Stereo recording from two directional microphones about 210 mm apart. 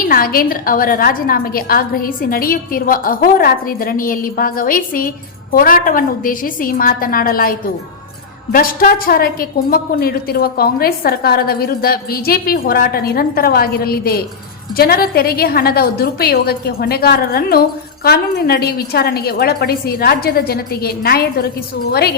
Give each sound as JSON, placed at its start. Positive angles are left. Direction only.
{"t": 0.0, "sound": "a woman's voice", "side_deg": 45}
{"t": 8.5, "sound": "a woman's voice", "side_deg": 45}